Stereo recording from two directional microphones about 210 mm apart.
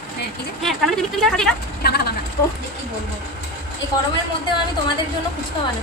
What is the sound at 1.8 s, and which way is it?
Speech, 50° left (ahead or behind).